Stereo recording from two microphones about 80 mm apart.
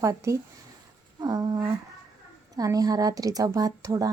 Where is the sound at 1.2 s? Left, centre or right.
Right.